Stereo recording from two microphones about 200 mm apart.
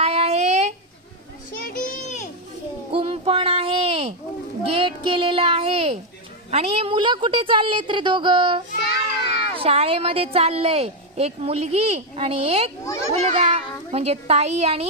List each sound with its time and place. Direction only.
0.0 s child singing: 30° right (ahead or behind)
1.5 s a sound: 45° left (ahead or behind)
2.9 s a sound: 25° right (ahead or behind)
4.7 s speech: 25° right (ahead or behind)
12.8 s a child's voice: 15° left (ahead or behind)
13.1 s a child's voice: 30° right (ahead or behind)